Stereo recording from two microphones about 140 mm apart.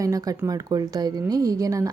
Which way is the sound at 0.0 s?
25° right (ahead or behind).